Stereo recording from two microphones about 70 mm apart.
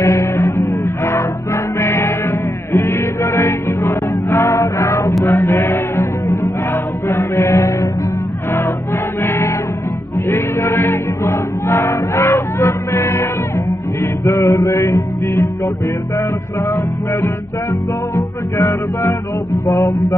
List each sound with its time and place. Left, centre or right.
0.0 s music: left
6.3 s chant: left
8.5 s music: left
16.6 s music: left
19.6 s mantra: left